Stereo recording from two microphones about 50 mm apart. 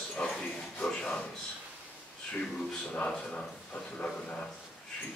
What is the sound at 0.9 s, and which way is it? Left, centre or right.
Speech, centre.